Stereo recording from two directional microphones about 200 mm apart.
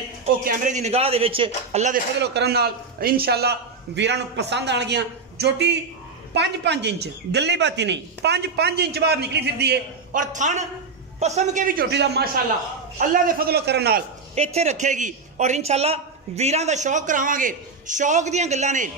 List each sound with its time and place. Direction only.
0.5 s a man's voice: 35° right (ahead or behind)
2.1 s speech: 55° right (ahead or behind)
10.2 s a man's voice: 40° right (ahead or behind); by 14.0 s 55° right (ahead or behind)
14.3 s a man's voice: 30° right (ahead or behind)